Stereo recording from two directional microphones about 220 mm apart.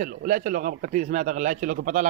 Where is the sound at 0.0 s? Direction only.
40° right (ahead or behind).